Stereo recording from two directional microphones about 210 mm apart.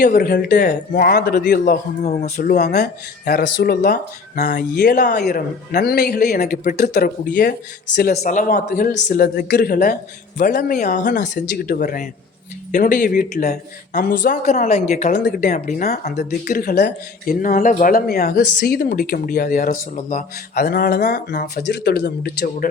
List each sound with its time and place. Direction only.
0.1 s speech: 45° left (ahead or behind)
4.4 s speech: 35° left (ahead or behind)
5.2 s speech: 50° left (ahead or behind)
8.2 s speech: 35° left (ahead or behind)